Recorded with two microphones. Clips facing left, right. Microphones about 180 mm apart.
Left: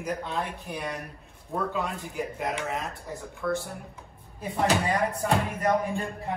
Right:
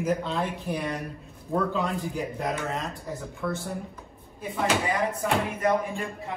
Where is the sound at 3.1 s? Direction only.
Centre (ahead or behind).